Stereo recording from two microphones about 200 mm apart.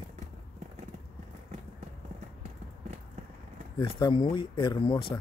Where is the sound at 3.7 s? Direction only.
25° left (ahead or behind).